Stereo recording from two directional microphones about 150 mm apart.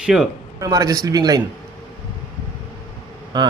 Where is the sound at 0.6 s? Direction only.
25° right (ahead or behind).